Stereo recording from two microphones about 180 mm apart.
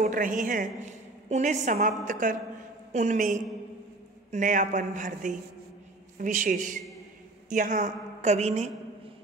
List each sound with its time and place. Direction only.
0.0 s a woman's voice: 50° right (ahead or behind)